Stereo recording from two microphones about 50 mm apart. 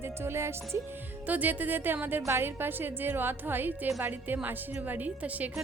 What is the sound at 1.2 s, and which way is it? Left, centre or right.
A woman's voice, right.